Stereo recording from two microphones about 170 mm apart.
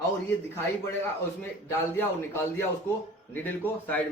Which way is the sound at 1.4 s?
15° left (ahead or behind).